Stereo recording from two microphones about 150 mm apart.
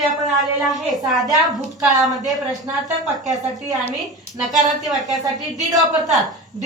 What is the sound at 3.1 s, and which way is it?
Speech, 25° right (ahead or behind).